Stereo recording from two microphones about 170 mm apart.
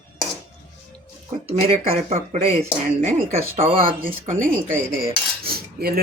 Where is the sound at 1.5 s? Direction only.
35° right (ahead or behind).